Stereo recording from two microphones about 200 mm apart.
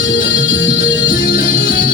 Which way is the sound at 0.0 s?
70° left (ahead or behind).